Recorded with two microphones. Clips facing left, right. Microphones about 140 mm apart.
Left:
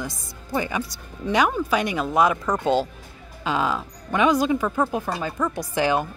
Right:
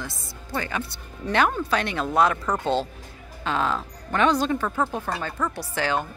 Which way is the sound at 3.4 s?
10° left (ahead or behind).